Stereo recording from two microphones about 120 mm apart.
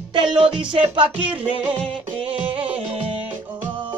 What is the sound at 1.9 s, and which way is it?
Music, 45° right (ahead or behind).